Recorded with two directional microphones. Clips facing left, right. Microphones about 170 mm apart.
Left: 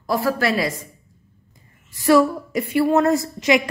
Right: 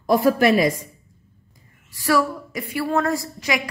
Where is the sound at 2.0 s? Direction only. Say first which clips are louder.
Left 5 dB; 25° left (ahead or behind).